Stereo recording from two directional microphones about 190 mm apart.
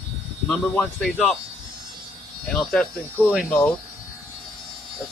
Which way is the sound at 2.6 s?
Centre (ahead or behind).